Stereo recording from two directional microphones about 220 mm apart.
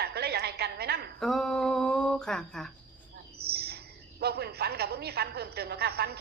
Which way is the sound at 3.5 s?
45° right (ahead or behind).